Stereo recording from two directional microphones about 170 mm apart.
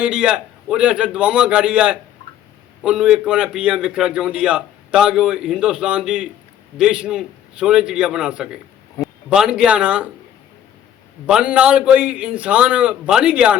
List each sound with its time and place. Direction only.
0.0 s a man's voice: 5° right (ahead or behind)
9.0 s a sound: 20° left (ahead or behind)
9.3 s a man's voice: 5° right (ahead or behind)
11.3 s a man's voice: 5° right (ahead or behind)